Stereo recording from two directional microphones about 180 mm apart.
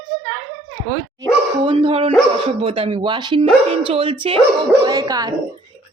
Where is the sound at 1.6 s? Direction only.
30° right (ahead or behind).